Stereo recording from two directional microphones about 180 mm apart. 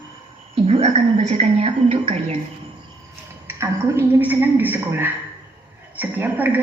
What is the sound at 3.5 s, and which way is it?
A woman's voice, 15° right (ahead or behind).